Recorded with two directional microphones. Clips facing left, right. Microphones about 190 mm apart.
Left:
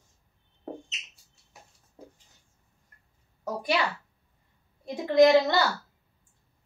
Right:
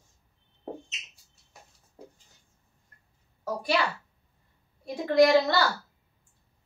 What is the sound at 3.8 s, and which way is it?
A child's voice, 20° left (ahead or behind).